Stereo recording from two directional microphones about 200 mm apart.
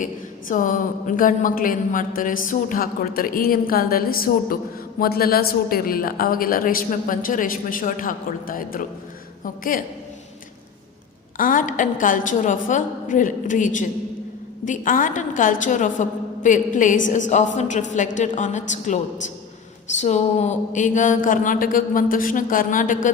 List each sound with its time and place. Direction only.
0.0 s speech: 40° left (ahead or behind)
11.3 s speech: 40° left (ahead or behind)
20.0 s speech: 35° left (ahead or behind)